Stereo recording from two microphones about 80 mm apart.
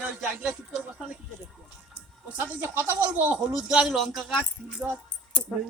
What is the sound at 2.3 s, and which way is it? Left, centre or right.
Speech, right.